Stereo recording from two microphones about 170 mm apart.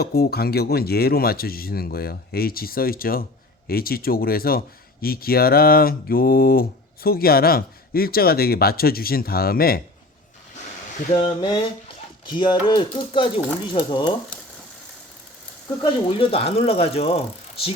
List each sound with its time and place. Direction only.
0.0 s speech: 65° left (ahead or behind)
11.1 s speech: 30° left (ahead or behind)
15.8 s speech: 30° left (ahead or behind)